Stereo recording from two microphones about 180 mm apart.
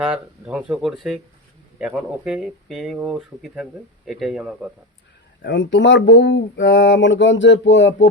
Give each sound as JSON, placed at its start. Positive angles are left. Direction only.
{"t": 0.0, "sound": "speech", "side_deg": -5}
{"t": 5.4, "sound": "speech", "side_deg": 75}